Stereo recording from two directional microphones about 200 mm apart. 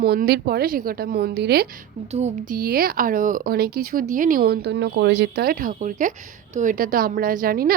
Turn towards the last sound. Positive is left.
turn(degrees=-45)  # may be behind; listen again after turning